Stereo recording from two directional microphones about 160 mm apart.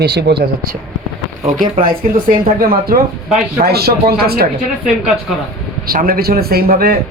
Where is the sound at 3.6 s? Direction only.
80° right.